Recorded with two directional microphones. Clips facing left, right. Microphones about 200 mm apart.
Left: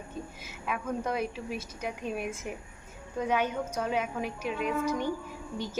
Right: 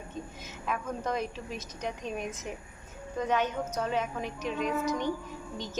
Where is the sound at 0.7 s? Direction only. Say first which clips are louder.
Left 1 dB; 10° left (ahead or behind).